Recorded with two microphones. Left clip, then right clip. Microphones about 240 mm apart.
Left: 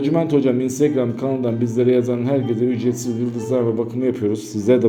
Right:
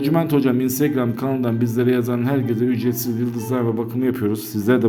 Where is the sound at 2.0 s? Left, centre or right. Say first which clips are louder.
Left 2 dB; right.